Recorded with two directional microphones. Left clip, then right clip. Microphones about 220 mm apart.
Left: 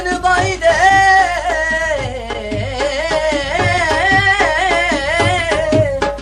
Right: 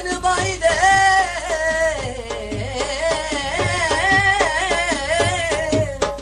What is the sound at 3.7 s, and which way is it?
Music, 5° left (ahead or behind).